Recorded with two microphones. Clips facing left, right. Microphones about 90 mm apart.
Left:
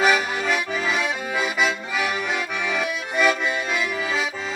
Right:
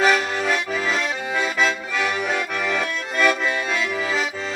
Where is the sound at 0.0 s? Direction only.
5° left (ahead or behind).